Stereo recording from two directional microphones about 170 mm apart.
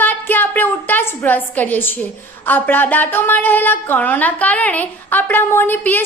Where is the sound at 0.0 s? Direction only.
10° left (ahead or behind).